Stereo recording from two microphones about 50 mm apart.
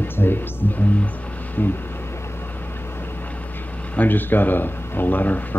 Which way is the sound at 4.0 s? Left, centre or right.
Left.